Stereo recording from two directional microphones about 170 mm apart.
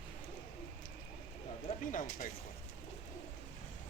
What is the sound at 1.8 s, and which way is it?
Speech, 50° left (ahead or behind).